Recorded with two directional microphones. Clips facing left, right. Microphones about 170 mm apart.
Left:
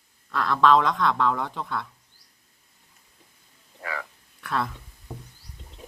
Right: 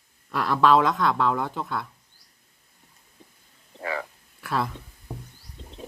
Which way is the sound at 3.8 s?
30° right (ahead or behind).